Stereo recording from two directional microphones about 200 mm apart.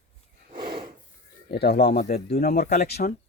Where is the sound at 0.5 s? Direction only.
50° right (ahead or behind).